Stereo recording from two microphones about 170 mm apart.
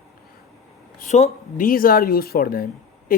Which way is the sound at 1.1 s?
45° left (ahead or behind).